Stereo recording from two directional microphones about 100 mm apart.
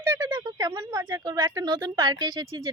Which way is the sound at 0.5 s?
40° right (ahead or behind).